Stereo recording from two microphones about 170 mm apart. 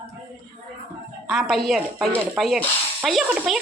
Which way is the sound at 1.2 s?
Centre (ahead or behind).